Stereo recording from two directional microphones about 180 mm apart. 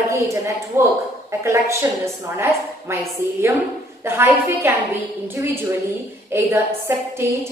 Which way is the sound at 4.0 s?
15° right (ahead or behind).